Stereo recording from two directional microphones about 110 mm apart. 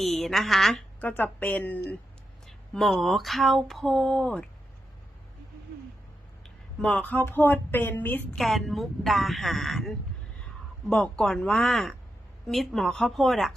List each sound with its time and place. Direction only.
0.0 s speech: centre (ahead or behind)
1.0 s speech: 15° left (ahead or behind)
2.5 s speech: centre (ahead or behind)
6.8 s speech: 10° left (ahead or behind)
8.4 s speech: centre (ahead or behind)